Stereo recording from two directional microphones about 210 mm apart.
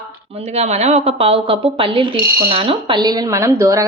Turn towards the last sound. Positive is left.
turn(degrees=-15)  # may be behind; listen again after turning